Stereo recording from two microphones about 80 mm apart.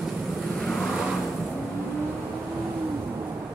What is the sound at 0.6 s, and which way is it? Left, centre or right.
Vehicle, centre.